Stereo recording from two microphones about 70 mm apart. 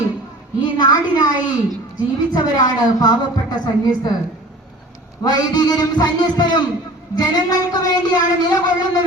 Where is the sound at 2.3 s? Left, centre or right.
Left.